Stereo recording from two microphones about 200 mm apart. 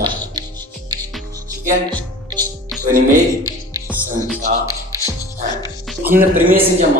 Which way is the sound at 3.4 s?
10° right (ahead or behind).